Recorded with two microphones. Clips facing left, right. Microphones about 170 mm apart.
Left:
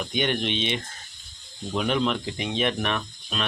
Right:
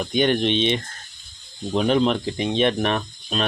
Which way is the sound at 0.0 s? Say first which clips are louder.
Right 6 dB; 35° right (ahead or behind).